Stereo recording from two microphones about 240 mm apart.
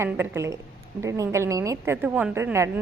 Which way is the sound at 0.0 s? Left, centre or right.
Centre.